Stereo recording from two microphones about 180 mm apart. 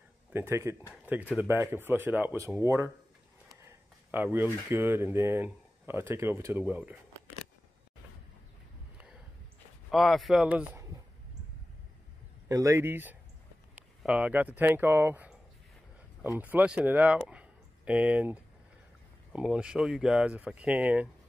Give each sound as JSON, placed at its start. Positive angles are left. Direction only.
{"t": 0.3, "sound": "speech", "side_deg": -15}
{"t": 9.8, "sound": "speech", "side_deg": 0}
{"t": 12.4, "sound": "speech", "side_deg": -15}